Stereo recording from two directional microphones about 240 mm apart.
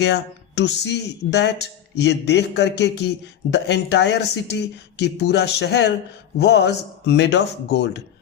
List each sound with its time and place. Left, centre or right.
0.0 s speech: left